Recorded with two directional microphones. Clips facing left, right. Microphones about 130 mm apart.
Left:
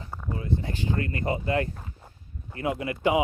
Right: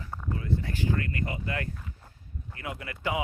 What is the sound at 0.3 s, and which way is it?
Speech, 20° left (ahead or behind).